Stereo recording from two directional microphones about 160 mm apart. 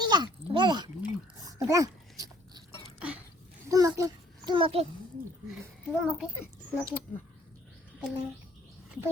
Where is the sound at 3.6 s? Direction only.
20° right (ahead or behind); by 4.8 s 35° right (ahead or behind).